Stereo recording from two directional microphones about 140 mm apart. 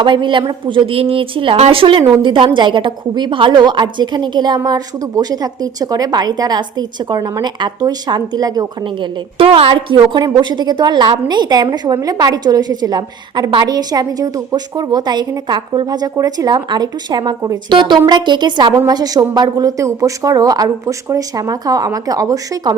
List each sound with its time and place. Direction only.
0.0 s a woman's voice: 35° right (ahead or behind)